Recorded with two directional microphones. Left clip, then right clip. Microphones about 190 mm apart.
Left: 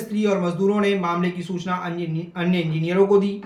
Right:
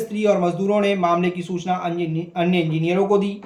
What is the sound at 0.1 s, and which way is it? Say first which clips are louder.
Speech: right 3 dB; 20° right (ahead or behind).